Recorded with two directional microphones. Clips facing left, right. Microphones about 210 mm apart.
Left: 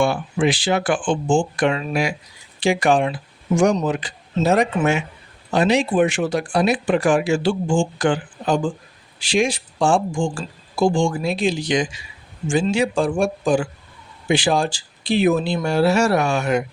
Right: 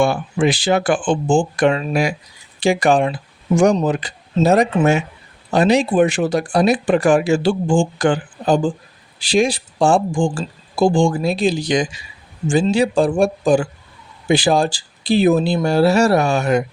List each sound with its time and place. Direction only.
0.0 s speech: 40° right (ahead or behind)